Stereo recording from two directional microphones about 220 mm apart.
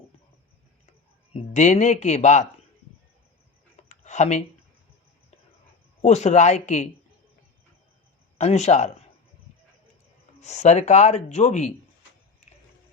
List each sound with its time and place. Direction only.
1.3 s speech: 30° left (ahead or behind)
3.8 s a sound: 30° left (ahead or behind)
6.0 s speech: 30° left (ahead or behind)
8.4 s speech: 30° left (ahead or behind)
10.4 s speech: 30° left (ahead or behind)